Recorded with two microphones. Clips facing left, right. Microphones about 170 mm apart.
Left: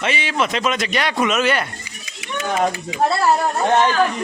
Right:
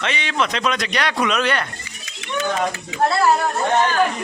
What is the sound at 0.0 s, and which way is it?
A man's voice, 5° left (ahead or behind).